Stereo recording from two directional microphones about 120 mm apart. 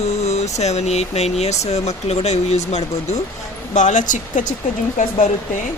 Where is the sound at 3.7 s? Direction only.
90° left.